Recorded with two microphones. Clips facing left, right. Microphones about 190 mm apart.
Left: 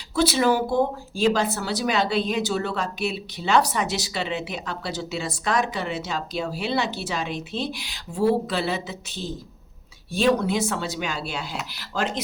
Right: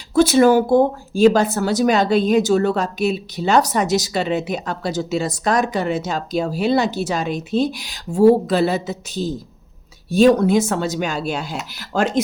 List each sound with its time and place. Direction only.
0.1 s speech: 50° right (ahead or behind)